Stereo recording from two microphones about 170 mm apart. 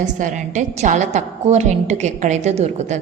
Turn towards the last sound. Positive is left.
turn(degrees=-40)  # may be behind; listen again after turning